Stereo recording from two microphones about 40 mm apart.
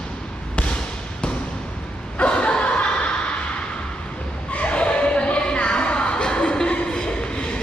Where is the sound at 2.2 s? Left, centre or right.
Left.